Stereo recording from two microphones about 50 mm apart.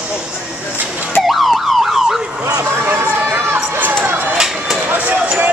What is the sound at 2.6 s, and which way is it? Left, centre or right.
Speech, right.